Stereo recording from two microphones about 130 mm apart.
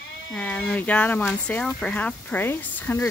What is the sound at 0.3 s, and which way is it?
Speech, 10° left (ahead or behind).